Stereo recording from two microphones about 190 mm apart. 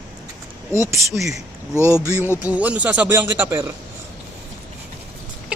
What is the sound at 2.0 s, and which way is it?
A man's voice, 15° right (ahead or behind).